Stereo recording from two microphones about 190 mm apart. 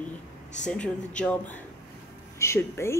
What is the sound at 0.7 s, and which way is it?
A woman's voice, 5° left (ahead or behind).